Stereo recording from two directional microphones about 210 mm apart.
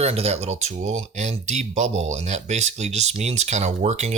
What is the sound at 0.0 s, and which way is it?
Speech, 30° right (ahead or behind).